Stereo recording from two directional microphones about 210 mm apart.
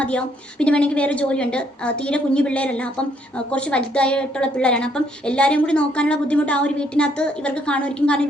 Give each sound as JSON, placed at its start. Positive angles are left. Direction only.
{"t": 0.0, "sound": "a woman's voice", "side_deg": 5}